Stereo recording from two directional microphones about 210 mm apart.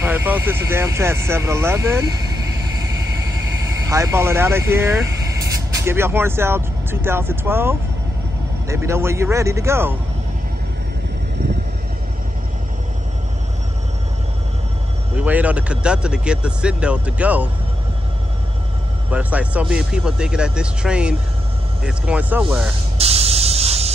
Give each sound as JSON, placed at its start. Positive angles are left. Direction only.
{"t": 0.0, "sound": "speech", "side_deg": -10}
{"t": 15.1, "sound": "speech", "side_deg": -5}
{"t": 19.0, "sound": "speech", "side_deg": -5}
{"t": 22.9, "sound": "spray", "side_deg": -30}